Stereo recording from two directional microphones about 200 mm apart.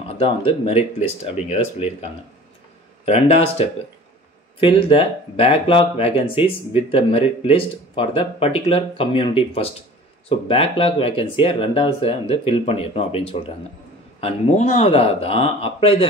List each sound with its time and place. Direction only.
0.1 s speech: 30° left (ahead or behind)
3.1 s speech: 35° left (ahead or behind)